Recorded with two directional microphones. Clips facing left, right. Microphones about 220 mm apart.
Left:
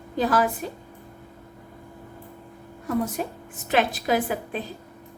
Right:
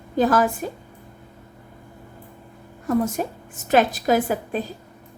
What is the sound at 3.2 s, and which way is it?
A woman's voice, 45° right (ahead or behind).